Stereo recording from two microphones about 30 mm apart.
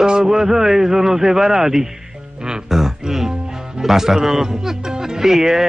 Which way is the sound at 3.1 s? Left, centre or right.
Centre.